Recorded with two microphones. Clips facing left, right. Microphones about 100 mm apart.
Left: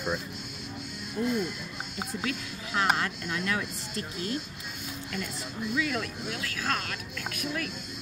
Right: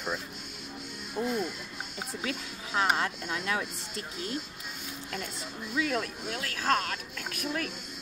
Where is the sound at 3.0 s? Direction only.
20° right (ahead or behind).